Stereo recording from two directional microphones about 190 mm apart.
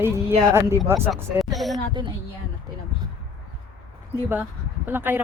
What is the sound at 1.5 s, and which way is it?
Speech, centre (ahead or behind).